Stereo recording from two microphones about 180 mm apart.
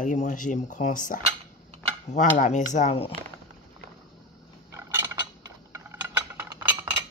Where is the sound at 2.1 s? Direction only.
40° left (ahead or behind).